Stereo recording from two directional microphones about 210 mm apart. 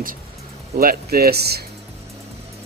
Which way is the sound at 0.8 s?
45° right (ahead or behind).